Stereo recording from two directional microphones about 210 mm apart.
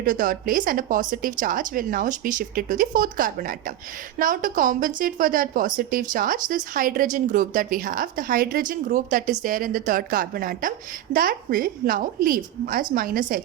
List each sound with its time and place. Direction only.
0.0 s a woman's voice: 40° right (ahead or behind)